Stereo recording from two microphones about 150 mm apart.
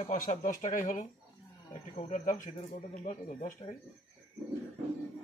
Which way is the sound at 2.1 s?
60° left (ahead or behind).